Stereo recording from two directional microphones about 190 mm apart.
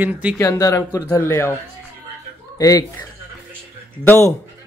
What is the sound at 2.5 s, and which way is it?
Speech, 20° left (ahead or behind).